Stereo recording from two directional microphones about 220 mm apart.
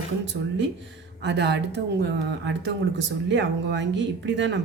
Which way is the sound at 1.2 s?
50° right (ahead or behind).